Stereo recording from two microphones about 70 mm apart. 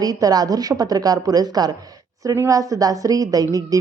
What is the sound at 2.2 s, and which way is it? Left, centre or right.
Speech, right.